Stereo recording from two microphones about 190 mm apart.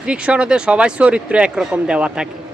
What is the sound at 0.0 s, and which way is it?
Speech, 5° right (ahead or behind).